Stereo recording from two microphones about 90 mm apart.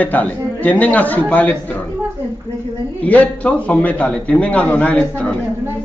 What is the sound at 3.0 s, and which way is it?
Speech, 15° left (ahead or behind).